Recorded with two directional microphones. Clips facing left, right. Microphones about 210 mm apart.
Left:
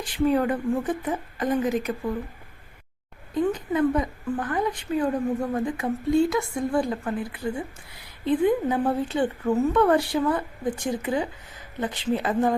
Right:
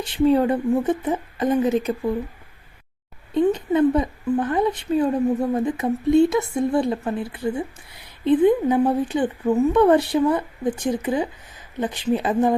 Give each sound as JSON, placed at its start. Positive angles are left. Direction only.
{"t": 0.0, "sound": "a woman's voice", "side_deg": -25}
{"t": 3.3, "sound": "a woman's voice", "side_deg": -25}